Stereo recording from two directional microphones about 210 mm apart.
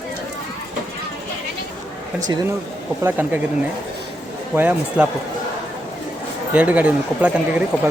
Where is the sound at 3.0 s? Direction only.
10° right (ahead or behind).